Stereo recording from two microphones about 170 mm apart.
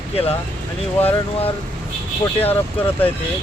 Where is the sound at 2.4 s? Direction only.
35° left (ahead or behind).